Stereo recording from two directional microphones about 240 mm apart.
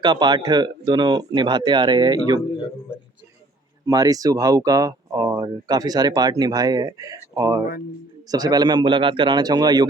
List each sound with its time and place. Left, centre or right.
0.0 s speech: centre
3.8 s speech: centre